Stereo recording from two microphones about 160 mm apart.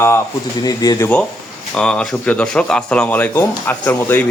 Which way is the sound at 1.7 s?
5° left (ahead or behind).